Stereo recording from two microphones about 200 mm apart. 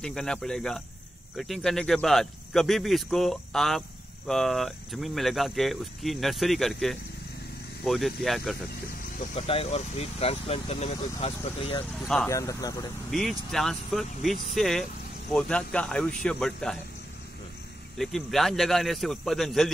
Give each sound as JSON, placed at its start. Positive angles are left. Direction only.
{"t": 0.0, "sound": "speech", "side_deg": 5}
{"t": 9.3, "sound": "speech", "side_deg": 30}
{"t": 12.3, "sound": "speech", "side_deg": 15}
{"t": 13.1, "sound": "speech", "side_deg": 0}
{"t": 17.9, "sound": "speech", "side_deg": 0}